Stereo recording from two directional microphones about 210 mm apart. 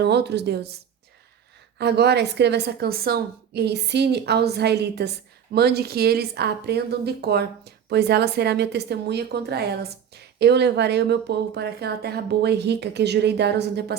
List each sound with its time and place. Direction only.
0.0 s a woman's voice: 55° right (ahead or behind)
1.8 s a woman's voice: 50° right (ahead or behind)